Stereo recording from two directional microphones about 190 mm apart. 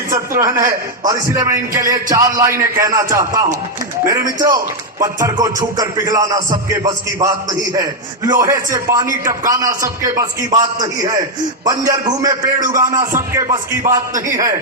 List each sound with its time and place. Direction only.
0.1 s a man's voice: 15° right (ahead or behind)
4.5 s music: 15° right (ahead or behind)
7.8 s a man's voice: 15° right (ahead or behind)
11.6 s music: 20° right (ahead or behind)